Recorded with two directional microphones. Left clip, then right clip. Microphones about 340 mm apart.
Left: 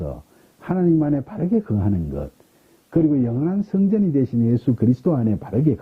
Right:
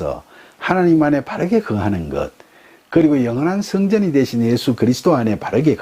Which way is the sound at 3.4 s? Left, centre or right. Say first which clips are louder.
Right 4 dB; centre.